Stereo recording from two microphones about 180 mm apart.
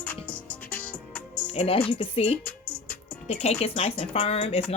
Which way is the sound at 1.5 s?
35° left (ahead or behind).